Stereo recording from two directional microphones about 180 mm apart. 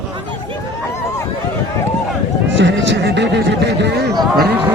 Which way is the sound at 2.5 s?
90° right.